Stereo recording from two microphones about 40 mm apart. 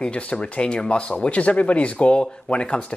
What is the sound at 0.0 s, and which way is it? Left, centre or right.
Speech, left.